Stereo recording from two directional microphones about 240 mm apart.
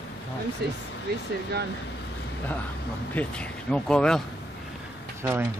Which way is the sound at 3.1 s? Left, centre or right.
Centre.